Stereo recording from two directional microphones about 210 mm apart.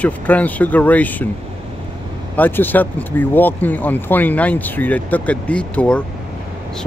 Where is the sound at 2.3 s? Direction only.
10° left (ahead or behind).